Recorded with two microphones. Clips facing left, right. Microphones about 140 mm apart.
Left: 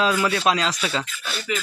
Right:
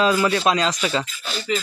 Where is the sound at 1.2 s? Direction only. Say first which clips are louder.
Right 3 dB; 35° right (ahead or behind).